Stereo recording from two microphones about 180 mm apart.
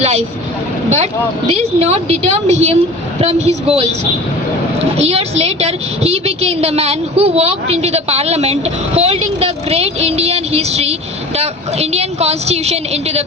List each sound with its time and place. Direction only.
0.0 s speech: 35° right (ahead or behind)
1.5 s a woman's voice: 35° right (ahead or behind)